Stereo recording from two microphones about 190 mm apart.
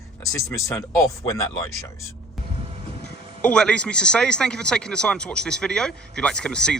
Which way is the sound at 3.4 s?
5° left (ahead or behind).